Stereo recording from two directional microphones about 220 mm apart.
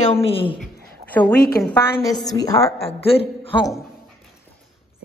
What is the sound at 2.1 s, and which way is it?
A woman's voice, 15° left (ahead or behind).